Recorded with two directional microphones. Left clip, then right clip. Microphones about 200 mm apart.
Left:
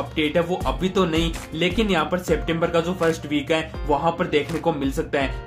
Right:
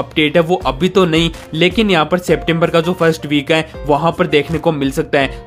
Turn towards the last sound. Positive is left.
turn(degrees=-40)  # may be behind; listen again after turning